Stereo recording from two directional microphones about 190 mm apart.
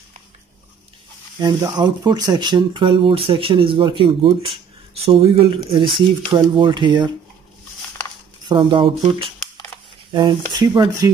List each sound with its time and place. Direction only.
1.4 s speech: 20° right (ahead or behind)
8.5 s speech: 25° right (ahead or behind)